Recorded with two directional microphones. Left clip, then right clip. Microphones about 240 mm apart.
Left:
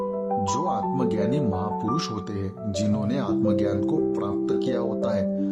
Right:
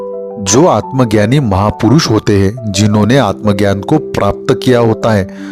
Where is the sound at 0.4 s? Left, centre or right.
Right.